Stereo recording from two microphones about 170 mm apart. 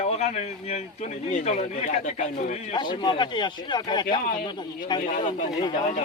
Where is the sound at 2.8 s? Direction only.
25° left (ahead or behind).